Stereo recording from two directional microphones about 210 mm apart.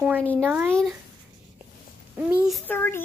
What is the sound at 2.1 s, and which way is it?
Speech, 5° right (ahead or behind).